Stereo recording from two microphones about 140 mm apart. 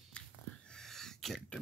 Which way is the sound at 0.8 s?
5° left (ahead or behind).